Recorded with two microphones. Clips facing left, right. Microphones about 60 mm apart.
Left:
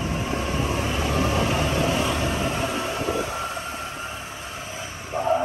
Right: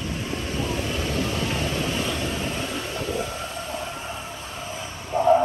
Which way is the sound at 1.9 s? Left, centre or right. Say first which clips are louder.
Left 3 dB; left.